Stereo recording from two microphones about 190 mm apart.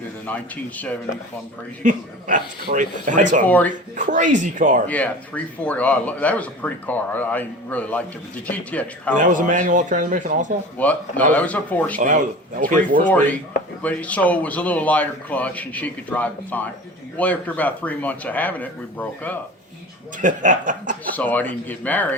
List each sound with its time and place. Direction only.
0.3 s speech: 10° left (ahead or behind)
1.8 s speech: 40° right (ahead or behind)
3.4 s speech: 10° left (ahead or behind)
3.9 s speech: 45° right (ahead or behind)
4.9 s speech: 10° left (ahead or behind)
9.1 s speech: 45° right (ahead or behind)
10.8 s speech: 10° left (ahead or behind)
11.9 s speech: 45° right (ahead or behind)
13.1 s speech: 10° left (ahead or behind)
20.2 s speech: 45° right (ahead or behind)
21.2 s speech: 10° left (ahead or behind)